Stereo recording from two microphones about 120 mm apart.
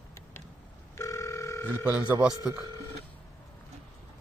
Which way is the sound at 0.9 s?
25° left (ahead or behind).